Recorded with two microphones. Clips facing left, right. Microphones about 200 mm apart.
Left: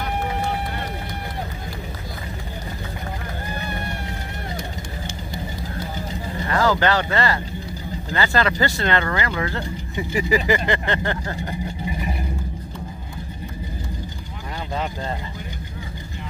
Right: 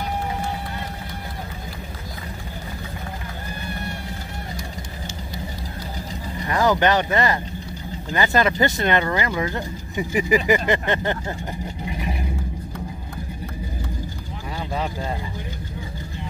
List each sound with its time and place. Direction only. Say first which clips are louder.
6.4 s speech: right 1 dB; 15° right (ahead or behind)
11.8 s vehicle: right 2 dB; centre (ahead or behind)